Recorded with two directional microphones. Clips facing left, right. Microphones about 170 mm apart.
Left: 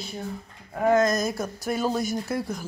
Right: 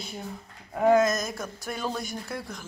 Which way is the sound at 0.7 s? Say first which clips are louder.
Even; 10° right (ahead or behind).